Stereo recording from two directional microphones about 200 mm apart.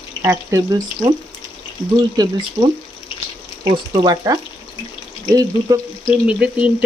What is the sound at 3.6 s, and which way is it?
Speech, 20° right (ahead or behind).